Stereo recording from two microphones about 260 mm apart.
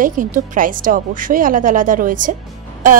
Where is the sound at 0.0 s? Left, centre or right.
Right.